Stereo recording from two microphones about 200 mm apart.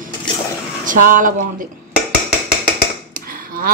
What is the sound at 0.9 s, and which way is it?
Speech, 40° right (ahead or behind).